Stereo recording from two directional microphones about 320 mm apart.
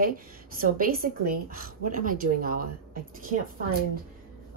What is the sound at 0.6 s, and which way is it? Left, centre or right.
A woman's voice, right.